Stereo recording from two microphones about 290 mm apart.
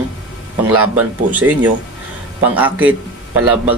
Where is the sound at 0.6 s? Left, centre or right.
Centre.